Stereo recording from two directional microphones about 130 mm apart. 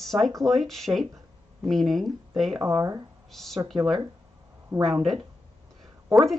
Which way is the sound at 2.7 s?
25° right (ahead or behind).